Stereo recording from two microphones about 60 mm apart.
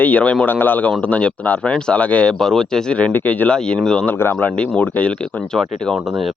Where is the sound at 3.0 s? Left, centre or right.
Left.